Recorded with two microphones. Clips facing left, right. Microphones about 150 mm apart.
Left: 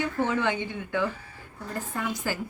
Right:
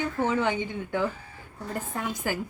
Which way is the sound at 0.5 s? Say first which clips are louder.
Even; 15° right (ahead or behind).